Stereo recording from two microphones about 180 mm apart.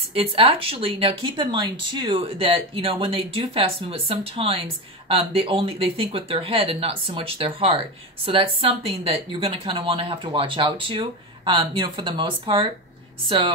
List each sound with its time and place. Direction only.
0.1 s speech: 30° right (ahead or behind)